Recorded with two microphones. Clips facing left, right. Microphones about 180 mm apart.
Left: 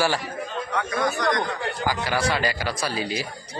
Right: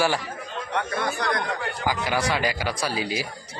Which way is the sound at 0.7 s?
30° right (ahead or behind).